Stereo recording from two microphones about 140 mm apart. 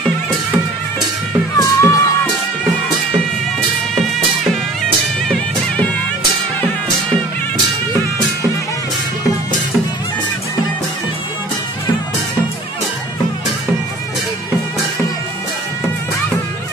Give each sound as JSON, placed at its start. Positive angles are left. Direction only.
{"t": 1.6, "sound": "music", "side_deg": 20}